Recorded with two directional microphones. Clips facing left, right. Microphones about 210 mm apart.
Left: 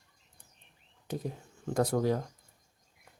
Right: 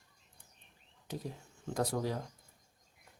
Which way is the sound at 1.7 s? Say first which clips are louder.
Left 6 dB; 50° left (ahead or behind).